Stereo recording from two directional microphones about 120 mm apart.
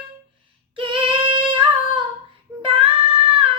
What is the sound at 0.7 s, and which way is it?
Female singing, 45° right (ahead or behind).